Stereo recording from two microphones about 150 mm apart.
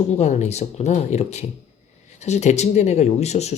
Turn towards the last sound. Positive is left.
turn(degrees=45)  # may be behind; listen again after turning